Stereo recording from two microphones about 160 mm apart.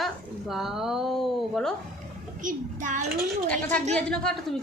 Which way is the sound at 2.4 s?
55° right (ahead or behind).